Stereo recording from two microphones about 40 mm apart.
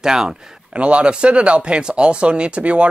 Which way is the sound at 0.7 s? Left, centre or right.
Right.